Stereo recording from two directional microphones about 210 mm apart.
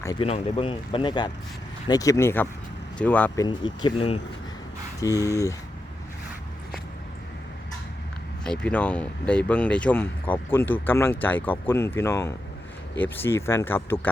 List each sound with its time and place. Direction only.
0.0 s speech: 15° left (ahead or behind)
3.4 s speech: 20° left (ahead or behind)
4.9 s speech: 15° left (ahead or behind)
8.4 s speech: 5° left (ahead or behind)